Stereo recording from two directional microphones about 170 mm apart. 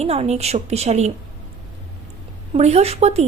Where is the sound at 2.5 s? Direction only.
40° right (ahead or behind).